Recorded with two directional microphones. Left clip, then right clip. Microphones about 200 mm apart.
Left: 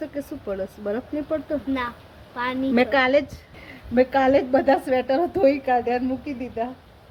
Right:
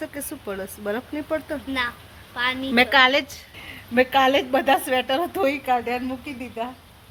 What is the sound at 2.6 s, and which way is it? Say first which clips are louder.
A woman's voice: right 3 dB; 5° right (ahead or behind).